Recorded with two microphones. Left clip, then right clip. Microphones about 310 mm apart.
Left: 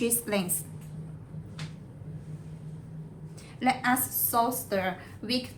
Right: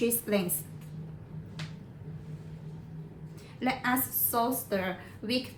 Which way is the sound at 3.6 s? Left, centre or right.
Centre.